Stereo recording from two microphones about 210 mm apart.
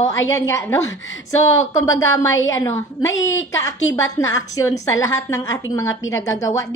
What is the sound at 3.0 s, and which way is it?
Speech, 65° left (ahead or behind).